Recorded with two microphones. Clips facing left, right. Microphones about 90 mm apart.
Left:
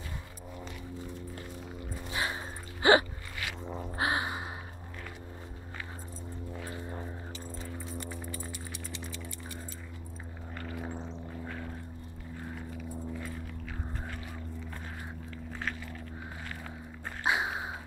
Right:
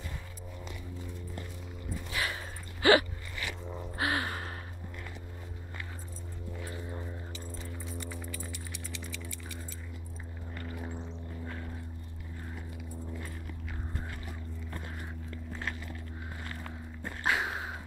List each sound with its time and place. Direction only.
2.0 s dog: 25° left (ahead or behind)
3.7 s a sound: 25° left (ahead or behind)
6.7 s music: 30° left (ahead or behind)
17.2 s dog: 20° left (ahead or behind)